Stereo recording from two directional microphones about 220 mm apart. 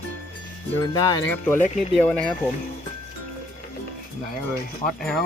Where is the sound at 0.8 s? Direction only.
15° left (ahead or behind).